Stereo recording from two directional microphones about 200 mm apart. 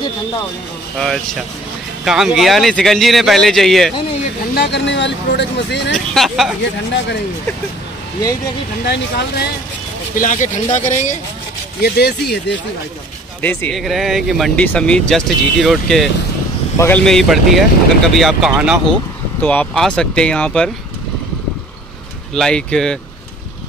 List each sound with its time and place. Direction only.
0.9 s speech: centre (ahead or behind)
4.6 s speech: 60° left (ahead or behind)
5.9 s speech: centre (ahead or behind)
8.8 s speech: 55° left (ahead or behind)
10.1 s speech: 40° left (ahead or behind)
11.8 s speech: 55° left (ahead or behind)
13.4 s speech: 10° left (ahead or behind)
22.3 s speech: 5° left (ahead or behind)